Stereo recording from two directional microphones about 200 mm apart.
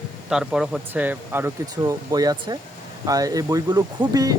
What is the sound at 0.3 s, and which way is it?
Speech, 5° right (ahead or behind).